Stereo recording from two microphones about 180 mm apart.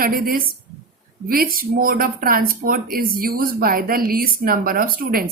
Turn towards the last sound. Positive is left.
turn(degrees=-55)  # may be behind; listen again after turning